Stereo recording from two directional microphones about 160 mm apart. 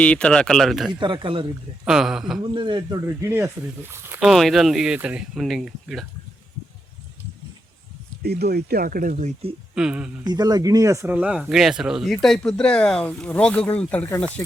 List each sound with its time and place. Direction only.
0.0 s speech: 5° left (ahead or behind)
0.9 s speech: 30° right (ahead or behind)
1.8 s speech: 5° right (ahead or behind)
2.4 s speech: 30° right (ahead or behind)
3.2 s speech: 15° right (ahead or behind)
4.3 s speech: centre (ahead or behind)
8.2 s speech: 85° right; by 9.3 s 55° right (ahead or behind)
9.7 s speech: 5° right (ahead or behind)
10.2 s speech: 25° right (ahead or behind); by 14.3 s 10° left (ahead or behind)